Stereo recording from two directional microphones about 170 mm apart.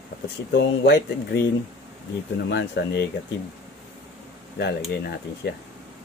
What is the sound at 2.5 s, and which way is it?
Speech, 75° left (ahead or behind).